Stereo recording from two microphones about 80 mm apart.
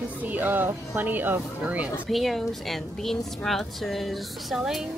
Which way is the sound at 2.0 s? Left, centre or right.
Centre.